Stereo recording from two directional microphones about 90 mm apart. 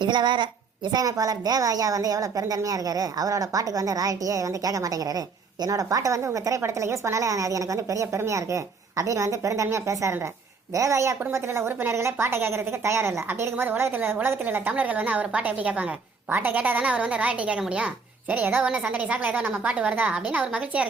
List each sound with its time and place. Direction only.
0.0 s a woman's voice: 55° right (ahead or behind)
0.9 s a woman's voice: 45° right (ahead or behind); by 20.8 s 15° right (ahead or behind)